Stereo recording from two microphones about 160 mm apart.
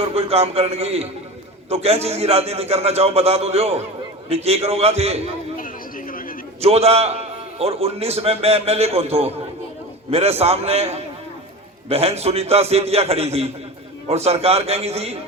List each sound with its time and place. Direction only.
0.1 s a man's voice: 40° right (ahead or behind)
5.5 s a sound: 60° left (ahead or behind)
6.6 s a man's voice: 40° right (ahead or behind)